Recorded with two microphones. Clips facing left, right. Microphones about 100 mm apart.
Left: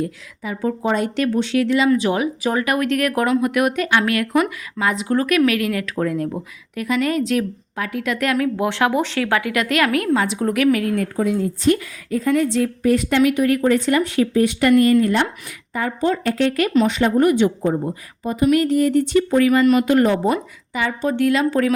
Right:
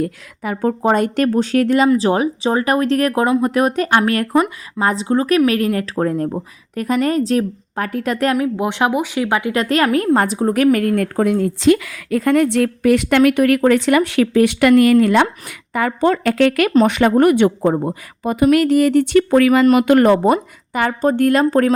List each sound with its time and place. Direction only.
0.0 s a woman's voice: 55° right (ahead or behind)
1.9 s a woman's voice: 35° right (ahead or behind)
8.4 s speech: 20° right (ahead or behind); by 19.6 s 70° right (ahead or behind)
19.6 s a woman's voice: 60° right (ahead or behind)